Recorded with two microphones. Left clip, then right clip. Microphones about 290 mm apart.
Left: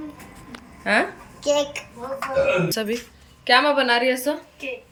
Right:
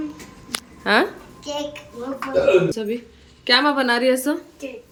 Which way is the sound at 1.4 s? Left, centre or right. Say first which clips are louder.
Left 7 dB; left.